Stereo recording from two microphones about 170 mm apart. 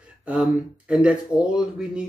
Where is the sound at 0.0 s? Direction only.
5° right (ahead or behind).